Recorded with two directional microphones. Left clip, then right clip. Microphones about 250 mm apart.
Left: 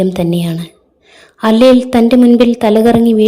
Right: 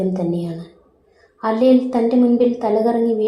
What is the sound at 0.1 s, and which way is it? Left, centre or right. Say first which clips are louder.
A woman's voice: left 7 dB; left.